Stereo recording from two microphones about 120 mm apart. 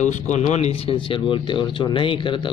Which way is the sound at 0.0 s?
80° left.